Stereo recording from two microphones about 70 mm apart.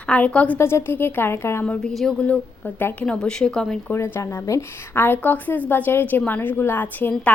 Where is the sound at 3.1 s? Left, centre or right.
Centre.